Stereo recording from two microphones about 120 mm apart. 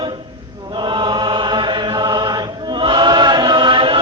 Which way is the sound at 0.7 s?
40° right (ahead or behind).